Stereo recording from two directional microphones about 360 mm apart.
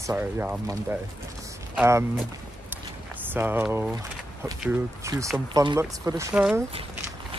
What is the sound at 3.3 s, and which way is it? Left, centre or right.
Speech, centre.